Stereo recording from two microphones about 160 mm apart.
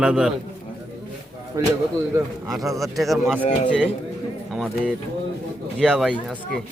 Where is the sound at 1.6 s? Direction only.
20° right (ahead or behind).